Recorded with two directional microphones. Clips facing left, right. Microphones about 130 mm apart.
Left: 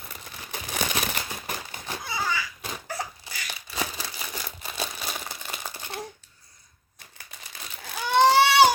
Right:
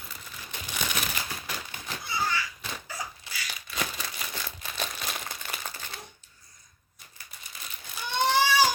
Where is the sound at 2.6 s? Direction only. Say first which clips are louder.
Left 4 dB; 55° left (ahead or behind).